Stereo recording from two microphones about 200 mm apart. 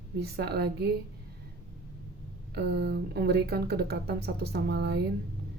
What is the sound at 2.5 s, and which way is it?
Speech, 55° right (ahead or behind).